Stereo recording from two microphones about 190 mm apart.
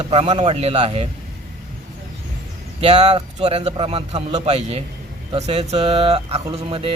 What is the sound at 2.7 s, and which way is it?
A man's voice, 35° right (ahead or behind).